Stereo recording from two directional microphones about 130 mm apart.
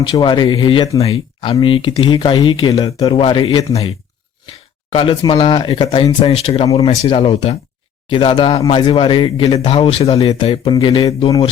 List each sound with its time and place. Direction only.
0.0 s speech: 35° left (ahead or behind)
4.9 s speech: 40° left (ahead or behind)
10.8 s speech: 35° left (ahead or behind)